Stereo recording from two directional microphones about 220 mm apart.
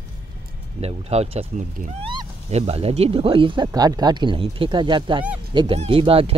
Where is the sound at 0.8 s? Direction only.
30° right (ahead or behind).